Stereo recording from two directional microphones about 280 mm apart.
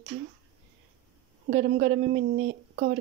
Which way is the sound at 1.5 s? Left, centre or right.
Right.